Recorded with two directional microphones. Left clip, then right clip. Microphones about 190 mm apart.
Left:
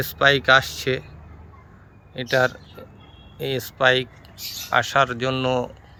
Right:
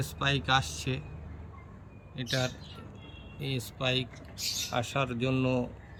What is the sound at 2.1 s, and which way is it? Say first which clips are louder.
Speech: left 13 dB; 15° left (ahead or behind).